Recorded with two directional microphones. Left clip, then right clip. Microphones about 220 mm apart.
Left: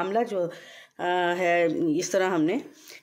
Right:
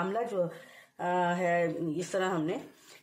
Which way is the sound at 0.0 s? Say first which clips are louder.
Left 5 dB; 40° left (ahead or behind).